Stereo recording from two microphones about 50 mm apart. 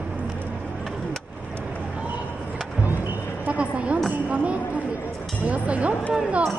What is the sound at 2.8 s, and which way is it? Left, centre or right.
Vehicle, right.